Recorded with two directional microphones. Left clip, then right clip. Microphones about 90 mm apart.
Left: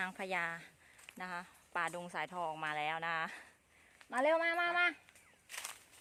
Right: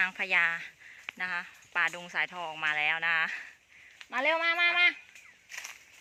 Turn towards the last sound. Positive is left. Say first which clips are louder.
# right 5 dB
turn(degrees=50)  # may be behind; listen again after turning